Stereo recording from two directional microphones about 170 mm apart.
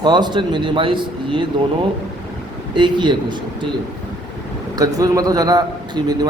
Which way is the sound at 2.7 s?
25° right (ahead or behind).